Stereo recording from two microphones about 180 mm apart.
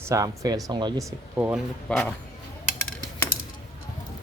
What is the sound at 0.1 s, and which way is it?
Speech, 20° right (ahead or behind).